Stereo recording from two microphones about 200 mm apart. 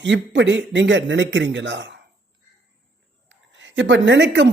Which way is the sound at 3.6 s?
65° right (ahead or behind).